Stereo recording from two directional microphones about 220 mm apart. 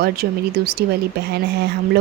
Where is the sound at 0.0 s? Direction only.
45° right (ahead or behind).